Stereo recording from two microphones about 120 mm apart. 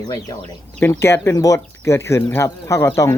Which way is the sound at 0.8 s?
20° left (ahead or behind).